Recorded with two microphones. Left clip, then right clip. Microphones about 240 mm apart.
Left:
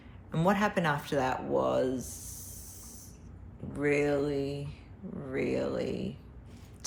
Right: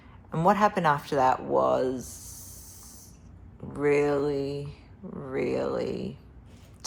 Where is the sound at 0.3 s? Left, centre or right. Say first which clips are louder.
Right 6 dB; right.